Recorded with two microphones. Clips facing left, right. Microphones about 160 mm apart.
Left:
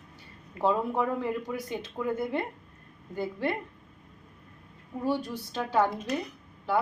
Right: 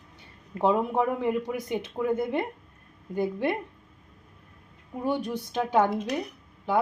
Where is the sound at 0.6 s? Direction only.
20° right (ahead or behind).